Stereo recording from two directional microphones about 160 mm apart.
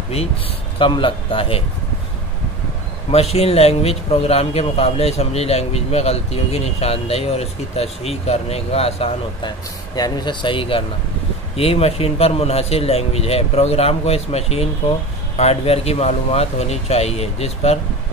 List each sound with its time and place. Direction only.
0.7 s a man's voice: 30° left (ahead or behind)
3.1 s a man's voice: 40° left (ahead or behind)
9.9 s a man's voice: 25° left (ahead or behind); by 17.7 s 40° left (ahead or behind)